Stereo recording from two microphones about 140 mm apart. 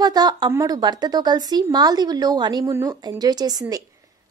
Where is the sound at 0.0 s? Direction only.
30° right (ahead or behind).